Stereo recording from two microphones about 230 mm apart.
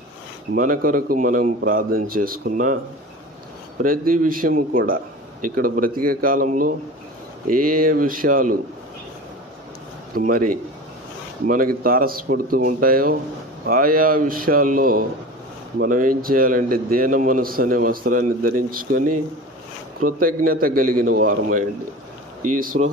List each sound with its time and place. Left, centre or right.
0.6 s a man's voice: right
3.8 s a man's voice: right
10.1 s a man's voice: right
20.1 s a man's voice: right